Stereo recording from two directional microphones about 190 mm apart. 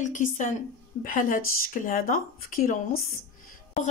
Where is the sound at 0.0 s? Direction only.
45° left (ahead or behind).